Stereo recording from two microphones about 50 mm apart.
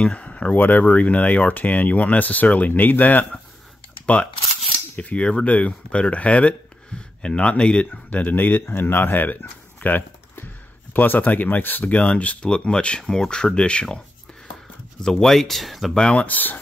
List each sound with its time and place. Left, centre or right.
0.0 s speech: left
4.0 s camera: left
4.9 s speech: left
15.0 s speech: centre
15.9 s speech: left